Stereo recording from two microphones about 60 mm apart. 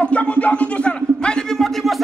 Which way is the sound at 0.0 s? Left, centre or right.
Left.